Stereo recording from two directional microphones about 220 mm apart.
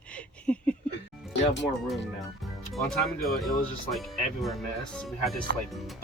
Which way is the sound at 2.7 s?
Centre (ahead or behind).